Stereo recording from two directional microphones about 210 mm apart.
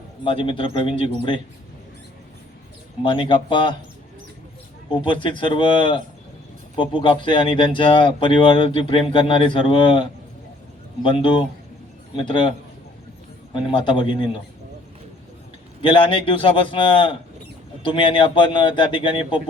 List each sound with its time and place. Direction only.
0.3 s speech: 25° left (ahead or behind)
3.0 s speech: 25° left (ahead or behind)
4.9 s speech: 20° left (ahead or behind)
15.8 s speech: 25° left (ahead or behind)